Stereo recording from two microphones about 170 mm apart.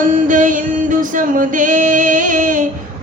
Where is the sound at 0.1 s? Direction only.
50° right (ahead or behind).